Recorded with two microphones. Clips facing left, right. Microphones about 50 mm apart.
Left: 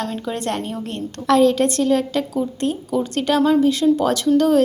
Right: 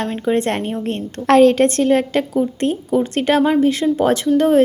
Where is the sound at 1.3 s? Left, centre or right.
Right.